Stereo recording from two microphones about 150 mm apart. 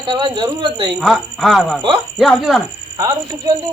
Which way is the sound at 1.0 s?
Centre (ahead or behind).